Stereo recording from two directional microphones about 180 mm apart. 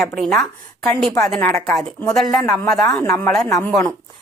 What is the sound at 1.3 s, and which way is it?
A woman's voice, 15° left (ahead or behind).